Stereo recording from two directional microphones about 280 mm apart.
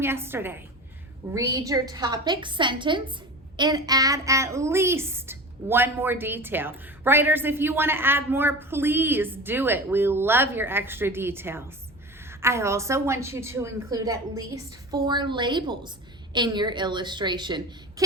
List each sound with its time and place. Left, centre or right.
0.0 s a woman's voice: centre